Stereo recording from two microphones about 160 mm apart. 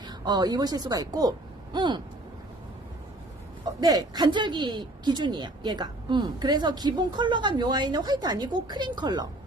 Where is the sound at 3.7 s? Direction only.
25° right (ahead or behind).